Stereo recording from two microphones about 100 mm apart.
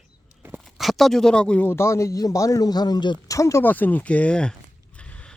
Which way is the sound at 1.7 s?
25° left (ahead or behind).